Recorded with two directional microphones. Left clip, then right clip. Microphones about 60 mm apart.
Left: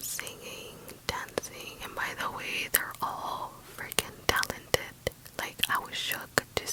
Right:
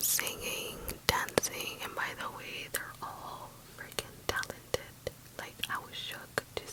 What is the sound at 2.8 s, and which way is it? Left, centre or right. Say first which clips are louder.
Whispering: left 8 dB; left.